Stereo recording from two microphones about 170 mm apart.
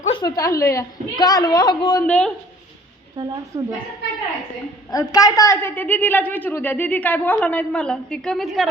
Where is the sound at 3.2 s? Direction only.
25° right (ahead or behind).